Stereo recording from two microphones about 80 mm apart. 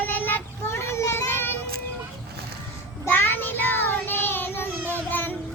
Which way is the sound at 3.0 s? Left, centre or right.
Left.